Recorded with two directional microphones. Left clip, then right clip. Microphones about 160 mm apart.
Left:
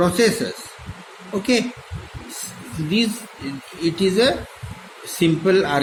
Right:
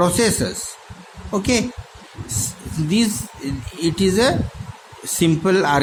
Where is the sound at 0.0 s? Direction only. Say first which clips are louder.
Even; 70° right (ahead or behind).